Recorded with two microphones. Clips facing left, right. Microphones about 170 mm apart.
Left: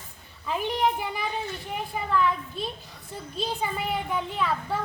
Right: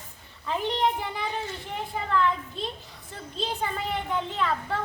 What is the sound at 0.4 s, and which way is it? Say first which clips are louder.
A child's voice: even; 10° left (ahead or behind).